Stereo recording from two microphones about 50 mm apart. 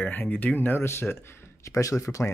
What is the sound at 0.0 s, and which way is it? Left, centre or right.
Speech, left.